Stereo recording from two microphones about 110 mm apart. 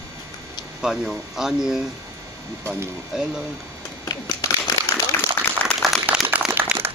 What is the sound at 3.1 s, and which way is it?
Speech, 5° right (ahead or behind).